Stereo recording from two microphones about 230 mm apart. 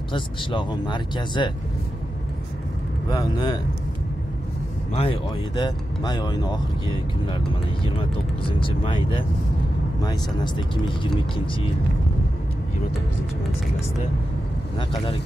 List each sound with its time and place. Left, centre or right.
0.1 s speech: left
3.1 s speech: centre
4.9 s speech: left
8.5 s speech: left
10.0 s speech: centre
14.8 s speech: left